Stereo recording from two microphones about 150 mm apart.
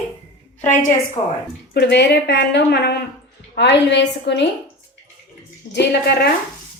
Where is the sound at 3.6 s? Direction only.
90° left.